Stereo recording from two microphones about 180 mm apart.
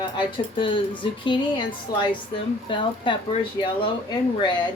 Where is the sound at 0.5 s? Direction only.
30° left (ahead or behind).